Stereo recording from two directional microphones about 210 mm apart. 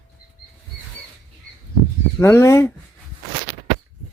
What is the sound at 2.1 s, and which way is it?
Speech, 10° left (ahead or behind).